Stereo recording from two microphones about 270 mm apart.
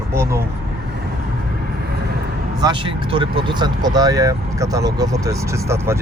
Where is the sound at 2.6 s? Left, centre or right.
Centre.